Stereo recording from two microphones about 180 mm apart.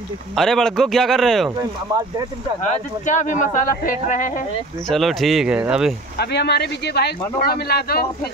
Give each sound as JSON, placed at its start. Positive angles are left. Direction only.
{"t": 0.4, "sound": "speech", "side_deg": 5}
{"t": 1.6, "sound": "speech", "side_deg": -20}
{"t": 2.6, "sound": "speech", "side_deg": 45}
{"t": 4.8, "sound": "speech", "side_deg": 0}
{"t": 6.1, "sound": "speech", "side_deg": 65}